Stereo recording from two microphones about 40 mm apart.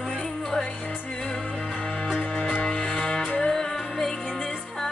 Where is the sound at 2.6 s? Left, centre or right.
Centre.